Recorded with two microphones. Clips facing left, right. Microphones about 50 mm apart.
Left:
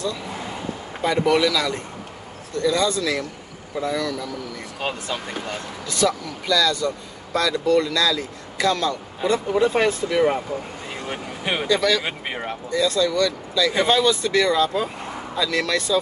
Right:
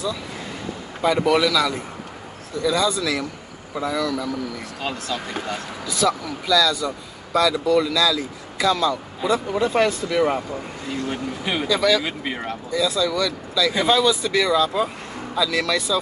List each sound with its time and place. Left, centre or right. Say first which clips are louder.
1.0 s speech: right 1 dB; centre
4.7 s speech: left 1 dB; left
5.5 s speech: right 2 dB; centre
10.9 s a sound: right 6 dB; left
11.6 s speech: right 1 dB; centre
12.0 s speech: right 1 dB; left
12.7 s speech: left 1 dB; centre